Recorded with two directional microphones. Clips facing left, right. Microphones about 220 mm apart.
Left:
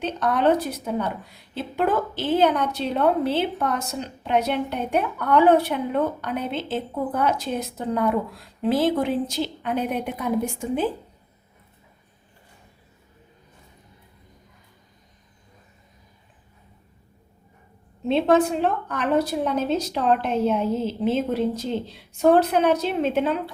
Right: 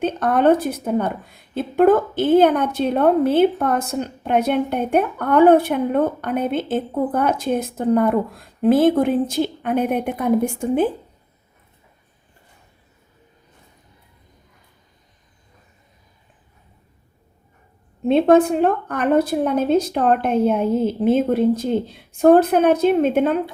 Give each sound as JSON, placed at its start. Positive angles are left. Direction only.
{"t": 0.0, "sound": "a woman's voice", "side_deg": -50}
{"t": 18.0, "sound": "a woman's voice", "side_deg": -50}